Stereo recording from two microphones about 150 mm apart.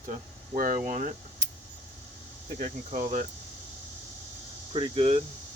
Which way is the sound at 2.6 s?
55° right (ahead or behind).